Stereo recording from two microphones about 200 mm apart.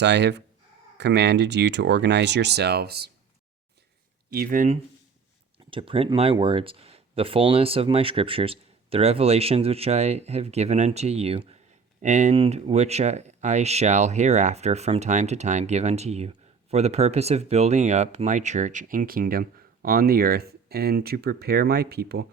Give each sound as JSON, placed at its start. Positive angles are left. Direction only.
{"t": 0.0, "sound": "speech", "side_deg": -60}
{"t": 4.3, "sound": "speech", "side_deg": -45}
{"t": 5.7, "sound": "speech", "side_deg": -25}